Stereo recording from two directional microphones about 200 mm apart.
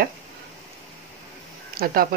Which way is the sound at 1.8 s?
50° right (ahead or behind).